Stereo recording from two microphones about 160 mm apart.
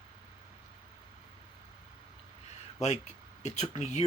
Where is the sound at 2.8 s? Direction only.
45° left (ahead or behind).